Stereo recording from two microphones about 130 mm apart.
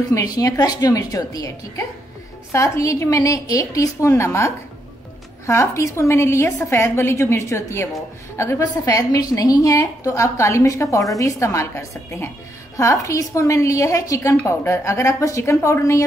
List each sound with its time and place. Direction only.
0.1 s a woman's voice: 30° left (ahead or behind)
2.5 s a woman's voice: 25° left (ahead or behind)
5.5 s a woman's voice: 20° left (ahead or behind)